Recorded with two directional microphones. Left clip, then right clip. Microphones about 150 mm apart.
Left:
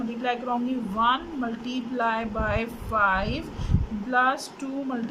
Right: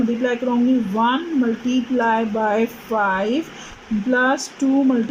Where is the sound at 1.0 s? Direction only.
55° right (ahead or behind).